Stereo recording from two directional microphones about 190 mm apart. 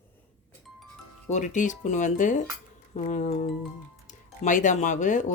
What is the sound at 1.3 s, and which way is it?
Speech, 40° left (ahead or behind).